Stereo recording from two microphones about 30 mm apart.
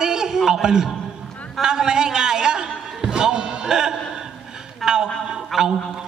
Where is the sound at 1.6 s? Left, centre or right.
Right.